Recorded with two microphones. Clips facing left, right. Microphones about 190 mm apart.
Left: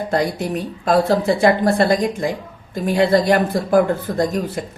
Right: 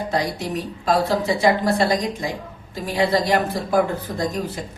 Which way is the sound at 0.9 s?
55° left (ahead or behind).